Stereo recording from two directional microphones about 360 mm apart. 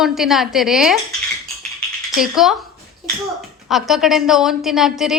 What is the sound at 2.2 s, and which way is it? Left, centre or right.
A woman's voice, centre.